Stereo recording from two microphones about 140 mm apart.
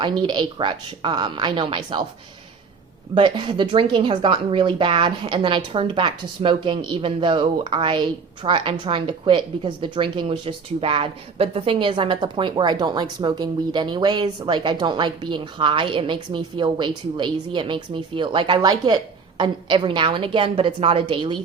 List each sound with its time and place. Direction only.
0.0 s a woman's voice: 35° right (ahead or behind)
3.2 s a woman's voice: 35° right (ahead or behind)